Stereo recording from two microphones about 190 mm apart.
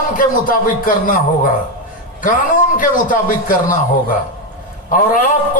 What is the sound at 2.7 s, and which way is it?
A man's voice, 45° left (ahead or behind).